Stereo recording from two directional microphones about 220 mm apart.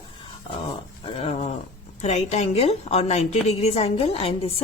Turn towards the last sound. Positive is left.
turn(degrees=25)  # may be behind; listen again after turning